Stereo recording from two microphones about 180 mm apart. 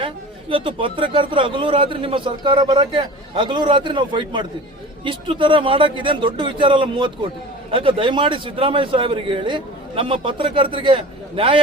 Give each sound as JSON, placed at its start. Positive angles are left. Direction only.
{"t": 0.5, "sound": "a man's voice", "side_deg": -30}